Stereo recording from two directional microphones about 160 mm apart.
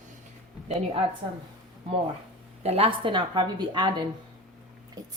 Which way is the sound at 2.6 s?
40° right (ahead or behind).